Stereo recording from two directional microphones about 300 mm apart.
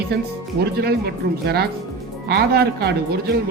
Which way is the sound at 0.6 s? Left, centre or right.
Right.